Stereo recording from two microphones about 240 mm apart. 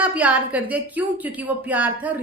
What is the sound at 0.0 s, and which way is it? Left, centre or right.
A woman's voice, centre.